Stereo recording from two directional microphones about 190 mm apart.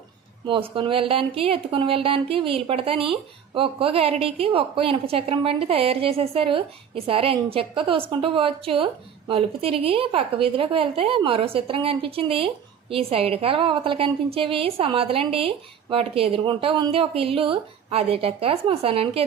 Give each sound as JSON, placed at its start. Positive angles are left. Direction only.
{"t": 0.4, "sound": "speech", "side_deg": -25}